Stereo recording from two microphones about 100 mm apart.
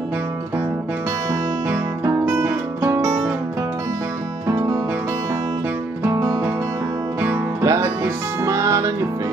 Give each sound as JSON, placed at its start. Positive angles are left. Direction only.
{"t": 1.7, "sound": "music", "side_deg": -20}
{"t": 7.6, "sound": "music", "side_deg": -30}